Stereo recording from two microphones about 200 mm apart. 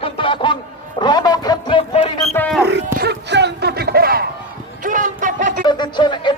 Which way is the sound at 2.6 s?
55° right (ahead or behind).